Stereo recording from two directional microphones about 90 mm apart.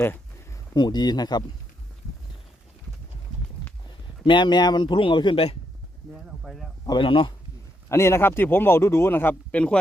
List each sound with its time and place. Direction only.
0.7 s speech: 55° left (ahead or behind)
4.2 s speech: 60° left (ahead or behind); by 5.5 s 80° left
6.0 s speech: 5° left (ahead or behind)
7.0 s a man's voice: 70° left (ahead or behind)
7.9 s speech: 30° left (ahead or behind); by 9.7 s 15° left (ahead or behind)